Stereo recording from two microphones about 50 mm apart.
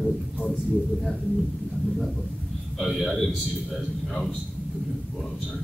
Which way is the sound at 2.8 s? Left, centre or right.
Centre.